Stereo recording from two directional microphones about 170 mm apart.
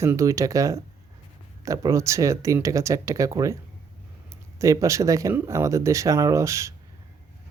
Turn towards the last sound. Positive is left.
turn(degrees=-15)  # may be behind; listen again after turning